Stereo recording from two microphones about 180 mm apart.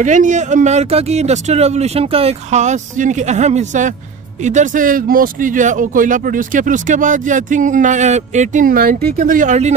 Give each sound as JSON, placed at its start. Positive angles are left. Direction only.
{"t": 0.0, "sound": "speech", "side_deg": -45}